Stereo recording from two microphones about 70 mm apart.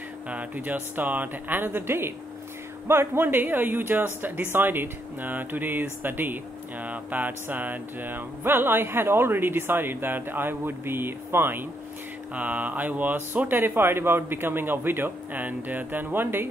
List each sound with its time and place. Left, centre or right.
0.3 s speech: right